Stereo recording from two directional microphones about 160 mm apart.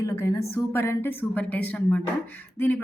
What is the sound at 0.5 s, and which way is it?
Speech, 15° left (ahead or behind).